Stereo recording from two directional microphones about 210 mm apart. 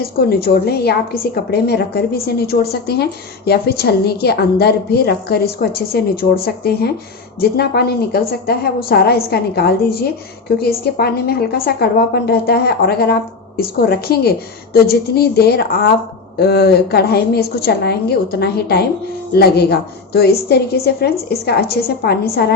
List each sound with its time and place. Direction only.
0.0 s a woman's voice: 45° left (ahead or behind)